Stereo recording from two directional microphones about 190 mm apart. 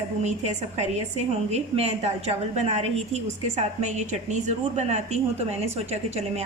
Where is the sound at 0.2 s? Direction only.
35° right (ahead or behind).